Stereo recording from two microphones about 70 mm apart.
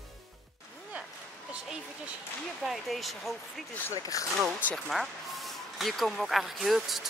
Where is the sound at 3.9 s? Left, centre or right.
Left.